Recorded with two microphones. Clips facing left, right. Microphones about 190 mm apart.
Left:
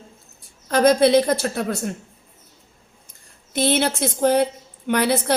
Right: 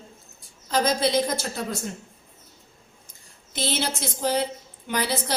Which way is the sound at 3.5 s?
60° left (ahead or behind).